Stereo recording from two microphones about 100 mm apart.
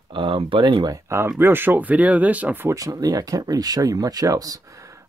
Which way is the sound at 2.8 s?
35° right (ahead or behind).